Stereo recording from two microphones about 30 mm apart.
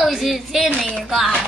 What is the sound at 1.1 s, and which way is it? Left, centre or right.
Music, centre.